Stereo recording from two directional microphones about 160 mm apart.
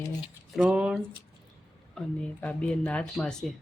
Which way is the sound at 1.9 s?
5° left (ahead or behind).